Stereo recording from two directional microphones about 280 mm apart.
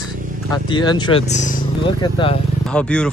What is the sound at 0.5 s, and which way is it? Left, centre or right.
Speech, centre.